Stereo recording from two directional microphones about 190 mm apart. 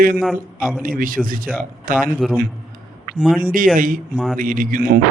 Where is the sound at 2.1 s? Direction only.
5° right (ahead or behind).